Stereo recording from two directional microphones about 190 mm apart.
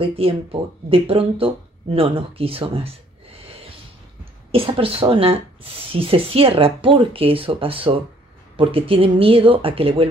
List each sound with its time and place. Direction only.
0.0 s speech: 30° right (ahead or behind)
4.2 s speech: 30° right (ahead or behind)